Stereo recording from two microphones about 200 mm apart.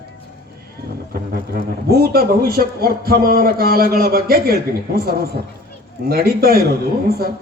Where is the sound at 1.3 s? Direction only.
50° right (ahead or behind).